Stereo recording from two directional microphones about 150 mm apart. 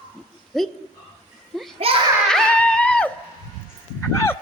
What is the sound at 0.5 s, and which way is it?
Speech, centre (ahead or behind).